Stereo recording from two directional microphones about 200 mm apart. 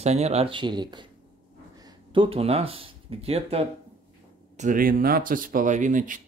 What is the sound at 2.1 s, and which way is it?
Speech, 25° right (ahead or behind).